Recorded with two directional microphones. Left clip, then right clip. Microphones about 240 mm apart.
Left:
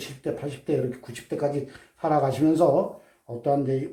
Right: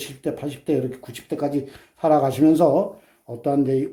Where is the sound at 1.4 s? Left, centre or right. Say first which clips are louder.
Right 1 dB; right.